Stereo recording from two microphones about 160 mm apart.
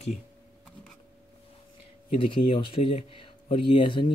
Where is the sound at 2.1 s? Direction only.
35° left (ahead or behind).